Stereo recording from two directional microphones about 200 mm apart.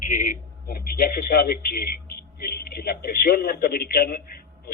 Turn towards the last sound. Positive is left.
turn(degrees=50)  # may be behind; listen again after turning